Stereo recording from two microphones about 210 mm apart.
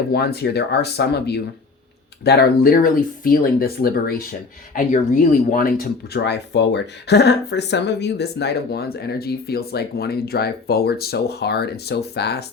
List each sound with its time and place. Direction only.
0.1 s speech: 50° left (ahead or behind)